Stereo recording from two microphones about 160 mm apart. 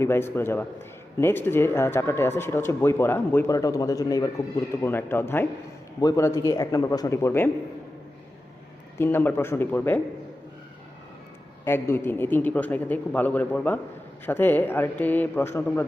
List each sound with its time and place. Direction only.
0.0 s a man's voice: 15° left (ahead or behind)
9.0 s a man's voice: 15° left (ahead or behind)
11.6 s a man's voice: 15° left (ahead or behind)